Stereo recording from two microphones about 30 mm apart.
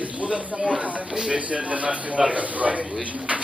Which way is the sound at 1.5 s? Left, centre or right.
Right.